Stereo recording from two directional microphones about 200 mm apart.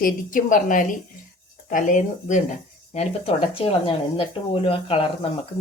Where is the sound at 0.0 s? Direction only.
40° left (ahead or behind).